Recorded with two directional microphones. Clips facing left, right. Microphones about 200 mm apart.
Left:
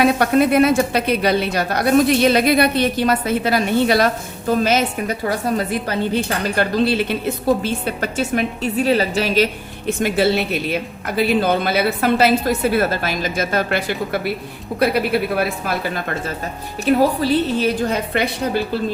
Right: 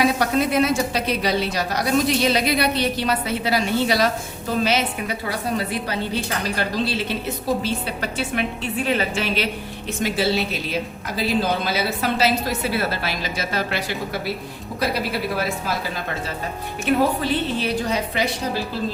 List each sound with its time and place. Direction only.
0.0 s a woman's voice: 55° left (ahead or behind)
6.6 s a woman's voice: 55° left (ahead or behind); by 9.5 s 40° left (ahead or behind)
10.0 s a woman's voice: 55° left (ahead or behind)
16.8 s a woman's voice: 35° left (ahead or behind); by 18.6 s 60° left (ahead or behind)